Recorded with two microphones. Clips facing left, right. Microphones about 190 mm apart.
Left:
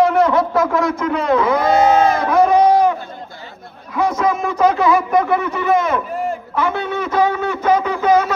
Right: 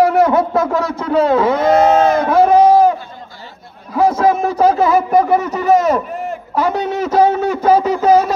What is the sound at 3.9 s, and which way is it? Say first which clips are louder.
Speech: right 4 dB; 35° right (ahead or behind).